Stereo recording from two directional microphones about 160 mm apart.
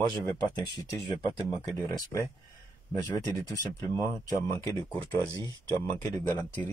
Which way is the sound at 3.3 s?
20° left (ahead or behind).